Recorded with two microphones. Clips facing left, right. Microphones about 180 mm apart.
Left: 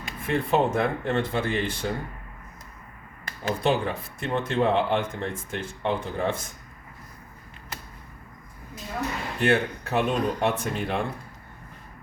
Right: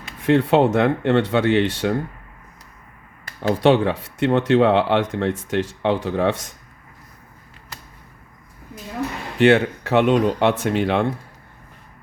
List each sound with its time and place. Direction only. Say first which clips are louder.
0.2 s speech: right 8 dB; 75° right (ahead or behind)
3.6 s speech: right 9 dB; 80° right
9.4 s speech: right 8 dB; 75° right (ahead or behind)